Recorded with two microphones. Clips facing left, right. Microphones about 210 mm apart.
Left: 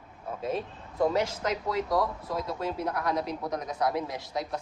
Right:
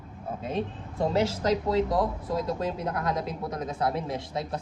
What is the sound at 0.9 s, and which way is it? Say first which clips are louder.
Speech: right 1 dB; 30° right (ahead or behind).